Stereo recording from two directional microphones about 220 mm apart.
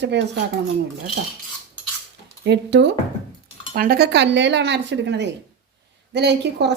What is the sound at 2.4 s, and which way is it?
Speech, 55° right (ahead or behind).